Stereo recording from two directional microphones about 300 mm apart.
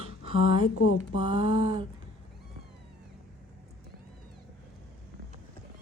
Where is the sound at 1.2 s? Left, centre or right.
Centre.